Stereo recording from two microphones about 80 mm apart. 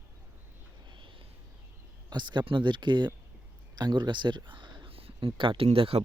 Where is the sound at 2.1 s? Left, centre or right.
Right.